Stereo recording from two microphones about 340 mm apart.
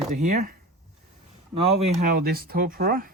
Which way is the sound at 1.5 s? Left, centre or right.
Right.